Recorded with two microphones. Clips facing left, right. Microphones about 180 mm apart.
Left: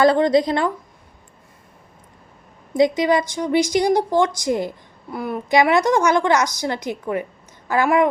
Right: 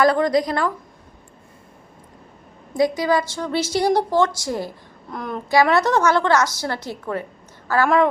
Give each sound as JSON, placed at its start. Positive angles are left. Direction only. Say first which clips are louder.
{"t": 0.0, "sound": "a woman's voice", "louder": "left 2 dB", "side_deg": 25}
{"t": 2.7, "sound": "a woman's voice", "louder": "left 2 dB", "side_deg": 20}
{"t": 5.1, "sound": "a woman's voice", "louder": "left 1 dB", "side_deg": 10}